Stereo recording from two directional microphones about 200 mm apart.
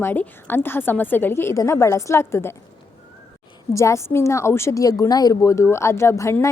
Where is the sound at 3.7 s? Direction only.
15° left (ahead or behind).